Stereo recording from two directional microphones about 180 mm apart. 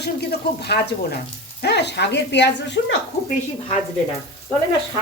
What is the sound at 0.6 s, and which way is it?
Speech, 60° left (ahead or behind).